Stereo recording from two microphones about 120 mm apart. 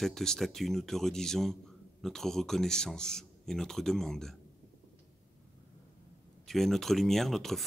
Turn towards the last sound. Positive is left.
turn(degrees=0)  # may be behind; listen again after turning